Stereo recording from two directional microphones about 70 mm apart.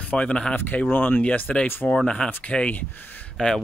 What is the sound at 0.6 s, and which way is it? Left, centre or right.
Speech, left.